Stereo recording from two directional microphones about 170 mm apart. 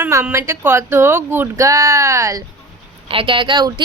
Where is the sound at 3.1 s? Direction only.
30° right (ahead or behind).